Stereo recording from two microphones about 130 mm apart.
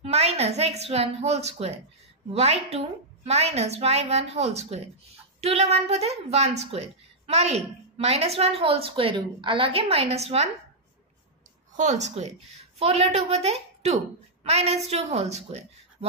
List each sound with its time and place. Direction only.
0.0 s a woman's voice: 55° right (ahead or behind)
11.7 s a woman's voice: 65° right (ahead or behind)